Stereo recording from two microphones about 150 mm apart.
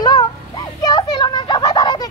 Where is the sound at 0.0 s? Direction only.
30° left (ahead or behind).